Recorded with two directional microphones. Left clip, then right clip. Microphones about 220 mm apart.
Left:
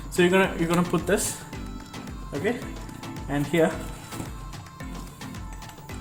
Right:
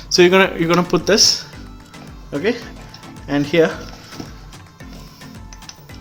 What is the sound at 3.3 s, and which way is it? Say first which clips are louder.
Speech: right 8 dB; 50° right (ahead or behind).